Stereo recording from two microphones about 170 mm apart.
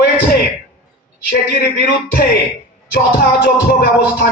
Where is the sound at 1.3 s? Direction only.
65° left (ahead or behind).